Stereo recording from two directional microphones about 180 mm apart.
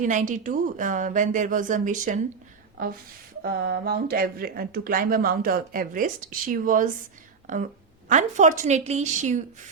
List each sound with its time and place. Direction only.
0.0 s speech: 45° right (ahead or behind)
3.4 s speech: 60° right (ahead or behind)
8.1 s a woman's voice: 45° right (ahead or behind)